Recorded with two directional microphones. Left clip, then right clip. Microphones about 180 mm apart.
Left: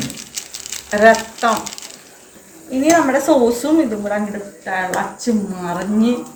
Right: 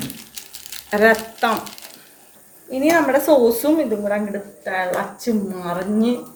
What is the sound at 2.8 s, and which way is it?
Speech, 45° right (ahead or behind).